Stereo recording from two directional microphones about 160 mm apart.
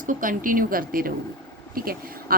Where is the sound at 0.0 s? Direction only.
55° right (ahead or behind).